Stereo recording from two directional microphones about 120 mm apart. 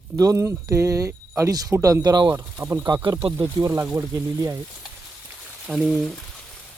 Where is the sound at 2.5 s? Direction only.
15° right (ahead or behind).